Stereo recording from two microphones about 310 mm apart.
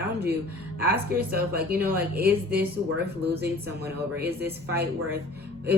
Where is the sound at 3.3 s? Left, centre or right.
Right.